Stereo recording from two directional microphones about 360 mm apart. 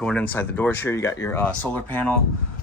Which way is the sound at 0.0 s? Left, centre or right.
Centre.